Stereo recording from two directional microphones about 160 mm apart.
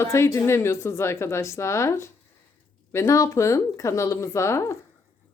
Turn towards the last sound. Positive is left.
turn(degrees=20)  # may be behind; listen again after turning